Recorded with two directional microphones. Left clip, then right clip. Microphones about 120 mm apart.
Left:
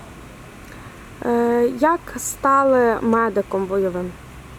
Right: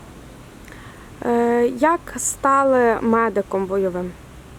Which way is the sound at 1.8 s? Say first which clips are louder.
Even; 5° right (ahead or behind).